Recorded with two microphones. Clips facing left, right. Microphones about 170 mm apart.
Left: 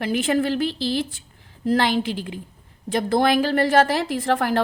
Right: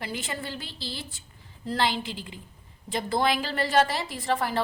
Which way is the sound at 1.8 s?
60° left (ahead or behind).